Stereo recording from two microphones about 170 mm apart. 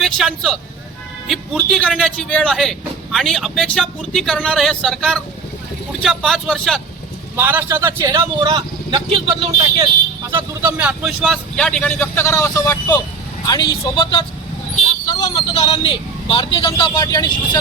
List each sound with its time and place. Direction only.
0.0 s speech: centre (ahead or behind)
1.7 s speech: centre (ahead or behind)
7.3 s a man's voice: 10° right (ahead or behind); by 9.9 s 30° right (ahead or behind)
10.3 s speech: 10° right (ahead or behind); by 13.0 s 15° left (ahead or behind)
13.4 s a man's voice: 25° left (ahead or behind)
15.0 s vehicle: 25° left (ahead or behind)
15.5 s a man's voice: 35° left (ahead or behind)